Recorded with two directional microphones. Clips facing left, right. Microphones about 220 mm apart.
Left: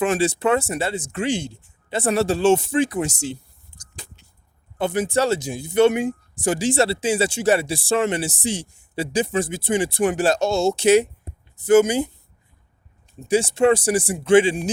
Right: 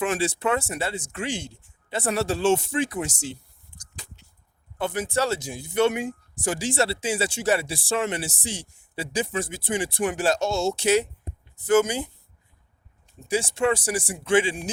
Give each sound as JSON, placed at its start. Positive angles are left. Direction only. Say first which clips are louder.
{"t": 0.0, "sound": "speech", "louder": "left 5 dB", "side_deg": 25}
{"t": 4.8, "sound": "speech", "louder": "left 5 dB", "side_deg": 15}
{"t": 10.8, "sound": "speech", "louder": "left 8 dB", "side_deg": 15}
{"t": 13.2, "sound": "speech", "louder": "left 6 dB", "side_deg": 20}